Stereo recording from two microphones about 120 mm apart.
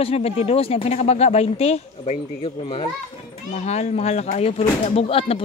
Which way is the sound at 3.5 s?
70° left (ahead or behind).